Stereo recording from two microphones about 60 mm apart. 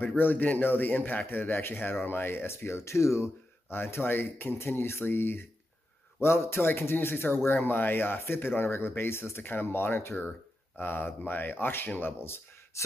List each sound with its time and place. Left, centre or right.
0.2 s speech: left
3.7 s speech: left
12.2 s a sound: left